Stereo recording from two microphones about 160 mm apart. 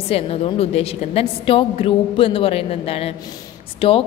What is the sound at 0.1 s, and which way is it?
A woman's voice, 35° left (ahead or behind).